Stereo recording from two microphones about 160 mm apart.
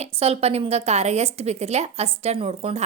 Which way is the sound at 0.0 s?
40° right (ahead or behind).